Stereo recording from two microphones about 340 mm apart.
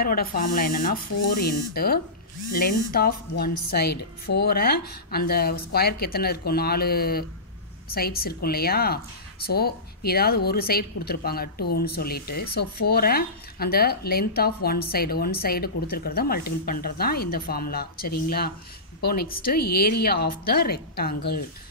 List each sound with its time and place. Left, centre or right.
0.0 s speech: left